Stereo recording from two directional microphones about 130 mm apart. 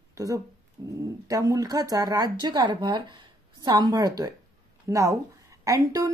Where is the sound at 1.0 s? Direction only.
25° right (ahead or behind).